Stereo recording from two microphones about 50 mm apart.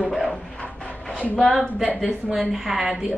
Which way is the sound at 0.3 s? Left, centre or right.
Centre.